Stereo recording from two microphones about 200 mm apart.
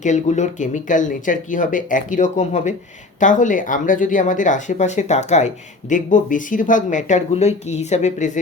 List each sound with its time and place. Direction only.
0.0 s speech: 35° left (ahead or behind)